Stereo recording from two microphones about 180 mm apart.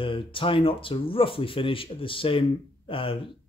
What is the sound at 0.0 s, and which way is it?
Speech, 30° left (ahead or behind).